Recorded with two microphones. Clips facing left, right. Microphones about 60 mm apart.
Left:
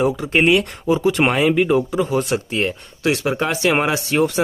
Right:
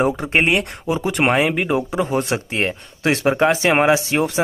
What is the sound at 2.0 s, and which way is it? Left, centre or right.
Speech, right.